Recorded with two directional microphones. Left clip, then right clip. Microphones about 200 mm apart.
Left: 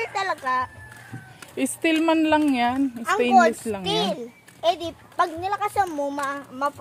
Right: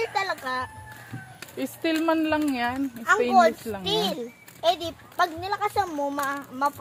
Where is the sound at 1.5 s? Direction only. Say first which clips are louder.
Left 4 dB; 60° left (ahead or behind).